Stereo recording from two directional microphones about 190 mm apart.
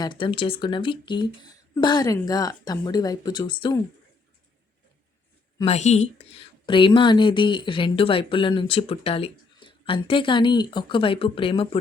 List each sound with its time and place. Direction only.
0.0 s a woman's voice: 25° left (ahead or behind)
5.6 s a woman's voice: 35° left (ahead or behind)